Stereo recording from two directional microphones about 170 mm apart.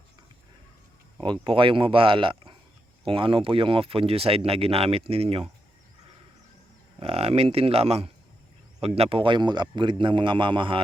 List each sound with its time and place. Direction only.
1.2 s a man's voice: 30° right (ahead or behind)
7.0 s a man's voice: 35° right (ahead or behind)